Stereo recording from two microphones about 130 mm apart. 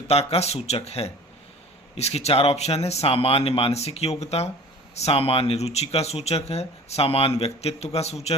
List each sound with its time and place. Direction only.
0.1 s speech: 50° left (ahead or behind)